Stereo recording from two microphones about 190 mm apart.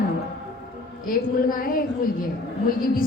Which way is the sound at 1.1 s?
50° left (ahead or behind).